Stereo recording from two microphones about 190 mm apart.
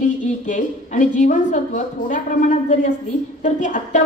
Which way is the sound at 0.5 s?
40° left (ahead or behind).